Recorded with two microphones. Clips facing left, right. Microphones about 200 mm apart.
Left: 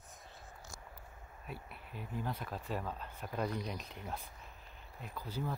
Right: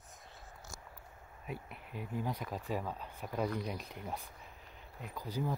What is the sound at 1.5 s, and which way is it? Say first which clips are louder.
Speech: right 4 dB; 15° right (ahead or behind).